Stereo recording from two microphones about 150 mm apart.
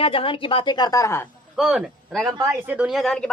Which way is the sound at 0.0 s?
35° left (ahead or behind).